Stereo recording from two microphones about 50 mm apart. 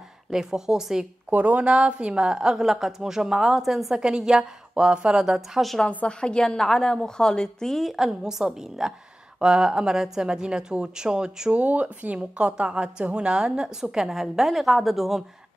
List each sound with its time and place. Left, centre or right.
0.3 s a woman's voice: centre
1.3 s a woman's voice: right; by 4.0 s centre
4.0 s a woman's voice: centre
6.0 s a woman's voice: centre
11.5 s a woman's voice: right; by 15.2 s centre